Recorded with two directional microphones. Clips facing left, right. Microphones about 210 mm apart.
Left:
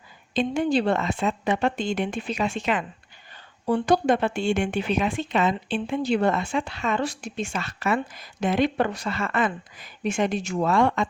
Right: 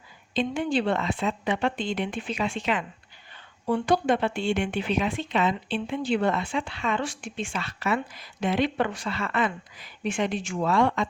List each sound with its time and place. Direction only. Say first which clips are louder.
0.3 s a woman's voice: left 3 dB; 40° left (ahead or behind)